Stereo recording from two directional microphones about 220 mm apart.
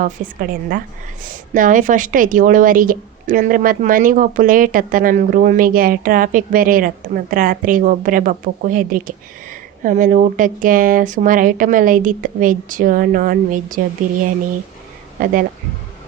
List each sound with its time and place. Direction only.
0.0 s a woman's voice: 40° right (ahead or behind)
15.2 s a woman's voice: 40° right (ahead or behind)